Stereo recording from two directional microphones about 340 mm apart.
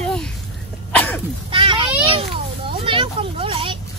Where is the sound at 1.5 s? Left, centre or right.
Centre.